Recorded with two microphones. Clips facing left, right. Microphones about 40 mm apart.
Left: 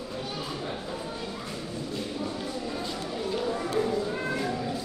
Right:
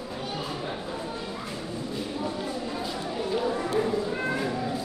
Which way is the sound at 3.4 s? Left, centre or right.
Centre.